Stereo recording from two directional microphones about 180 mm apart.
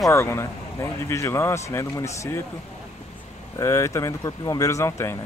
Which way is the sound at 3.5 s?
15° left (ahead or behind).